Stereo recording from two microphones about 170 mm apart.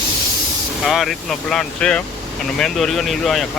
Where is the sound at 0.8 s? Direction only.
Centre (ahead or behind).